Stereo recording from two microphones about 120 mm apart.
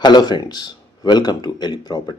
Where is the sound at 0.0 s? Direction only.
35° left (ahead or behind).